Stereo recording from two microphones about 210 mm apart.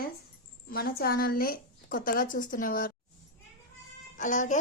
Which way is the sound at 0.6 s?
45° left (ahead or behind).